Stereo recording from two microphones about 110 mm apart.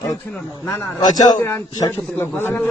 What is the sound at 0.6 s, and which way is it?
Speech, 25° left (ahead or behind).